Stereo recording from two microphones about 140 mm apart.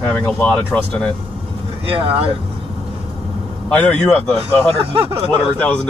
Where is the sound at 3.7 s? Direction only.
10° left (ahead or behind).